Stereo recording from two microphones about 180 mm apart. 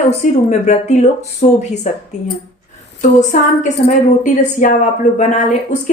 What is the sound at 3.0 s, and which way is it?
A woman's voice, 40° left (ahead or behind).